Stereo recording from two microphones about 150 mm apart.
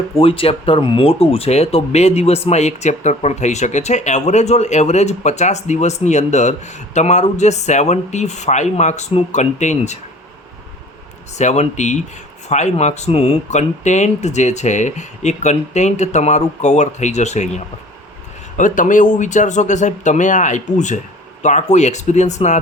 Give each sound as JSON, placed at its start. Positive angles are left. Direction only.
{"t": 0.1, "sound": "speech", "side_deg": 40}
{"t": 11.3, "sound": "speech", "side_deg": 50}
{"t": 18.5, "sound": "speech", "side_deg": 60}